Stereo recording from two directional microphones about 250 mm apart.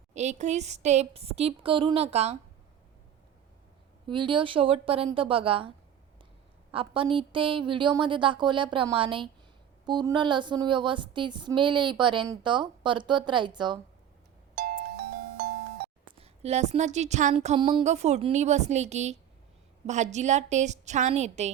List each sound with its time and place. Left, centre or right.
0.1 s a woman's voice: right
4.0 s a woman's voice: centre
14.5 s music: right
16.0 s a woman's voice: right